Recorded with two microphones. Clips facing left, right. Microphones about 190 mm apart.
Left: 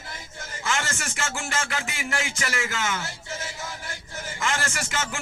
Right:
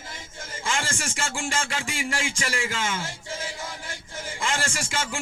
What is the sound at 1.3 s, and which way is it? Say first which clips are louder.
Music: right 1 dB; 30° right (ahead or behind).